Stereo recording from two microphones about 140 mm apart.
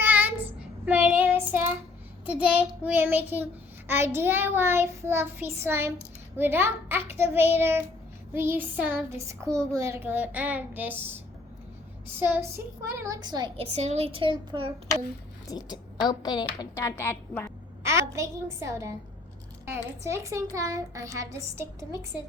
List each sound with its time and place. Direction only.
0.0 s child singing: 10° right (ahead or behind)
12.2 s child singing: 15° right (ahead or behind)
12.9 s a child's voice: 20° right (ahead or behind)
13.6 s a child's voice: 50° right (ahead or behind)
15.4 s a woman's voice: 30° left (ahead or behind)
17.8 s a child's voice: 20° right (ahead or behind)